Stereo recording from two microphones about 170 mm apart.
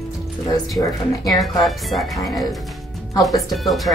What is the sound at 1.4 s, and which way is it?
Speech, centre (ahead or behind).